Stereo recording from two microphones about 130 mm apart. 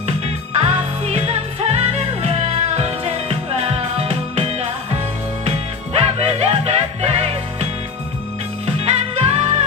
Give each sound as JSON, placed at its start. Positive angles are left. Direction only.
{"t": 0.6, "sound": "music", "side_deg": -55}
{"t": 8.6, "sound": "music", "side_deg": -50}